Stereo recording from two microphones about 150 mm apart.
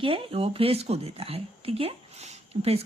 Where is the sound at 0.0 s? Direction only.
35° right (ahead or behind).